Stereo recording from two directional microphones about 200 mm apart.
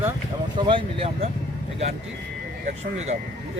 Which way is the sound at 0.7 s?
30° right (ahead or behind).